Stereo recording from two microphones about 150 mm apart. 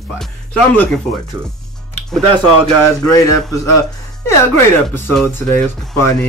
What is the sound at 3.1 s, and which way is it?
Speech, 20° left (ahead or behind).